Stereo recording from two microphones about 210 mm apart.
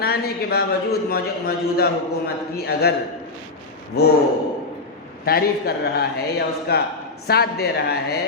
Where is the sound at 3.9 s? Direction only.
50° left (ahead or behind).